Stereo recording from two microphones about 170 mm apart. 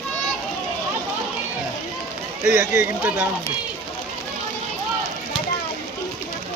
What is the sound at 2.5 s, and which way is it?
Speech, 10° right (ahead or behind).